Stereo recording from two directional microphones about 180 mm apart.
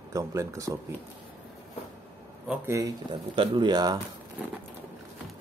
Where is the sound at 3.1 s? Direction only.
25° right (ahead or behind).